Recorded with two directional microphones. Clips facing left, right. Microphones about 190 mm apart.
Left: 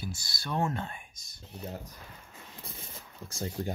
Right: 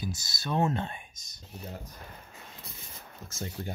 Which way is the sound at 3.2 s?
35° left (ahead or behind).